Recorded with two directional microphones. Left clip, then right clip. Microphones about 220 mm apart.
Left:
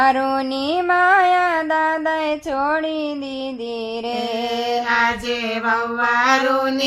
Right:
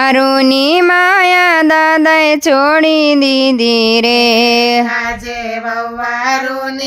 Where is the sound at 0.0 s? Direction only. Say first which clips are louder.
Right 7 dB; 50° right (ahead or behind).